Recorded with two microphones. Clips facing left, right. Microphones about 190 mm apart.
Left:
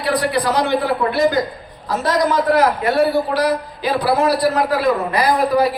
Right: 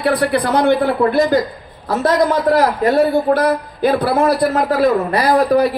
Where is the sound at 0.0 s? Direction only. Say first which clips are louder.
Right 3 dB; 55° right (ahead or behind).